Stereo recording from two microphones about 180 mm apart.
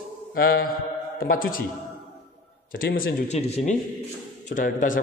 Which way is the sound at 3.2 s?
40° left (ahead or behind).